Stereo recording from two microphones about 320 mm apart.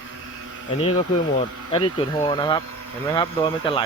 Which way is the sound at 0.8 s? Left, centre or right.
Centre.